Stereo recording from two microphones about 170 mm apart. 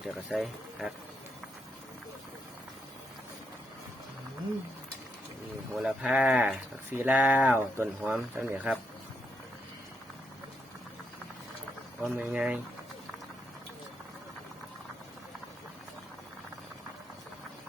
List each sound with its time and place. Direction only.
0.0 s speech: centre (ahead or behind)
5.7 s speech: 5° right (ahead or behind)
12.0 s speech: 10° right (ahead or behind)